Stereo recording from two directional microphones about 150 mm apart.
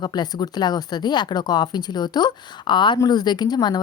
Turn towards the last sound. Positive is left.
turn(degrees=25)  # may be behind; listen again after turning